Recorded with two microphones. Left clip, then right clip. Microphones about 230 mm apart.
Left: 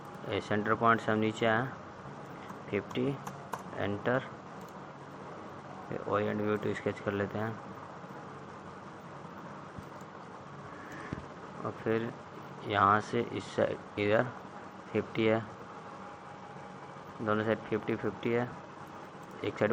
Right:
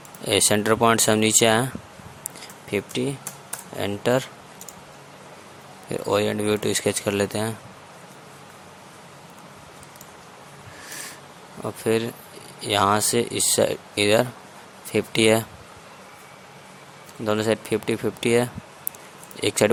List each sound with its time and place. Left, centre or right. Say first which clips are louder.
0.3 s speech: right 12 dB; right
5.9 s speech: right 10 dB; right
11.6 s speech: right 10 dB; right
17.2 s speech: right 8 dB; right